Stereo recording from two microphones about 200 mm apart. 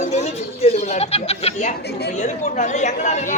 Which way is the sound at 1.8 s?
55° left (ahead or behind).